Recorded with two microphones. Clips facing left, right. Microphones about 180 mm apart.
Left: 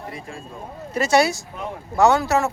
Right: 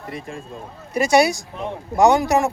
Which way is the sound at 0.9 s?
15° right (ahead or behind).